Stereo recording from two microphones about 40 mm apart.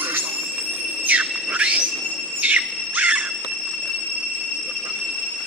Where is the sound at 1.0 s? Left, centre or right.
Right.